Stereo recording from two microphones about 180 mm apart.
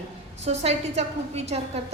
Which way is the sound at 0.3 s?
35° right (ahead or behind).